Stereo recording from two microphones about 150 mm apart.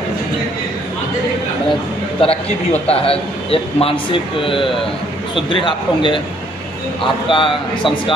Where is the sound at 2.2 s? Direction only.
40° left (ahead or behind).